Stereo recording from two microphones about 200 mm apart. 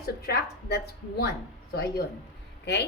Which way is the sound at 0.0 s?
50° left (ahead or behind).